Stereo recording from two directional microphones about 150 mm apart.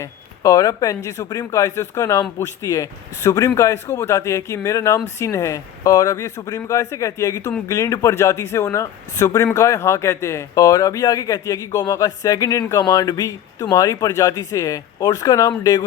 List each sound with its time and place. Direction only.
0.0 s speech: 20° left (ahead or behind)